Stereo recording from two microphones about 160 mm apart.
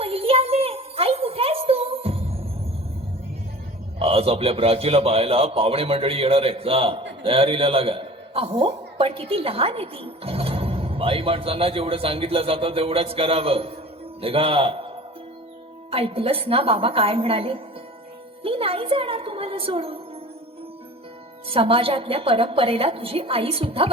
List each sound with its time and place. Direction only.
0.0 s a sound: 35° right (ahead or behind)
4.0 s a man's voice: 35° right (ahead or behind)
15.9 s a man's voice: 35° right (ahead or behind)
21.5 s a man's voice: 35° right (ahead or behind)